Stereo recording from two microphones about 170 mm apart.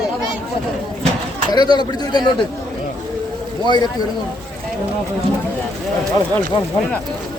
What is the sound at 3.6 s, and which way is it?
Speech, 25° left (ahead or behind).